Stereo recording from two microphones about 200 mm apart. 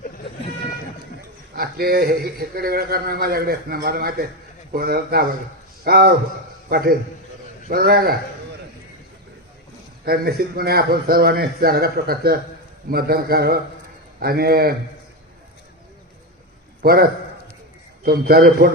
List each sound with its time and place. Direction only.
1.5 s a man's voice: 50° right (ahead or behind)
10.1 s a man's voice: 50° right (ahead or behind)
16.8 s a man's voice: 50° right (ahead or behind)